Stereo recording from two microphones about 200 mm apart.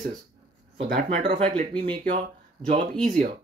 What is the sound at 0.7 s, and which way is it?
Speech, 55° right (ahead or behind).